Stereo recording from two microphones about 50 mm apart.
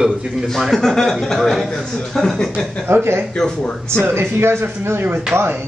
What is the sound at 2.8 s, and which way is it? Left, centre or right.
Speech, right.